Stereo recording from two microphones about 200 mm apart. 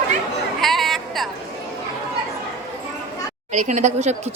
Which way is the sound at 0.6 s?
Centre (ahead or behind).